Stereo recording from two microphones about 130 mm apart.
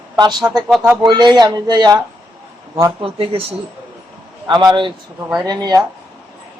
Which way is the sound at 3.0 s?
45° right (ahead or behind).